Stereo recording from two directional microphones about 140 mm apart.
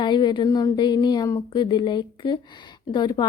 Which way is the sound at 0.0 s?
35° left (ahead or behind).